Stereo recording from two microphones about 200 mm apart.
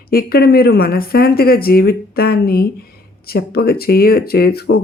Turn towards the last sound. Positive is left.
turn(degrees=50)  # may be behind; listen again after turning